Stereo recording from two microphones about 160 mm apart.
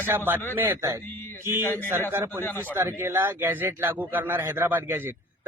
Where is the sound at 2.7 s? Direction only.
15° right (ahead or behind).